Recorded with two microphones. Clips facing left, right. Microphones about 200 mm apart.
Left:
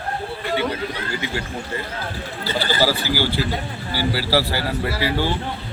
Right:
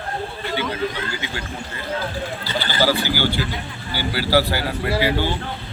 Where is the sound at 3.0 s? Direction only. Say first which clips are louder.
Left 1 dB; 35° left (ahead or behind).